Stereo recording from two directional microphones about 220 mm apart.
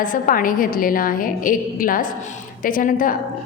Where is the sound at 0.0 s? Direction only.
35° left (ahead or behind).